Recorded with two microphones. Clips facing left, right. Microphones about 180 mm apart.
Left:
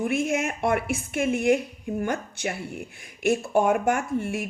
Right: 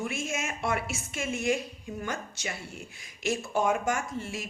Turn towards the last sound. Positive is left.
turn(degrees=60)  # may be behind; listen again after turning